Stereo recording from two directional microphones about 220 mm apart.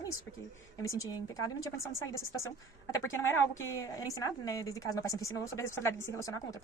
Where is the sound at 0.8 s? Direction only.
15° left (ahead or behind).